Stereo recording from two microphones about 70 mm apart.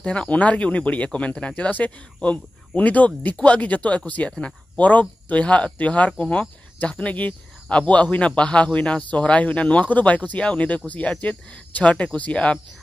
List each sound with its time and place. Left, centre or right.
0.0 s speech: centre